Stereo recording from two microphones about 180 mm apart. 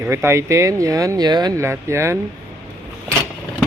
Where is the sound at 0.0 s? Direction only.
15° right (ahead or behind).